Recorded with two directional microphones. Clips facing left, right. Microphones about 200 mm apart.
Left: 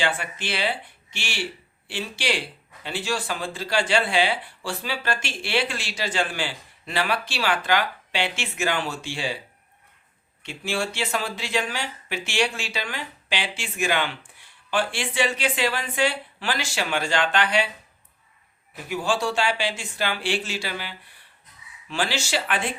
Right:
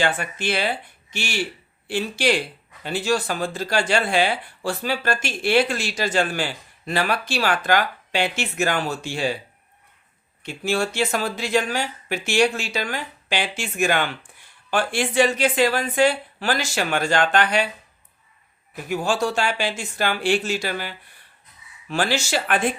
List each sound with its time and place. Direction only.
0.0 s speech: 45° right (ahead or behind)
10.4 s speech: 45° right (ahead or behind)
18.9 s speech: 45° right (ahead or behind)